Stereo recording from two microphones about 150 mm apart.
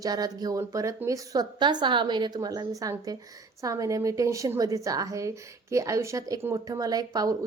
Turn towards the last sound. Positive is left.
turn(degrees=-25)  # may be behind; listen again after turning